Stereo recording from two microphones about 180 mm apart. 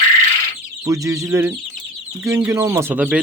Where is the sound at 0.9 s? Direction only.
15° right (ahead or behind).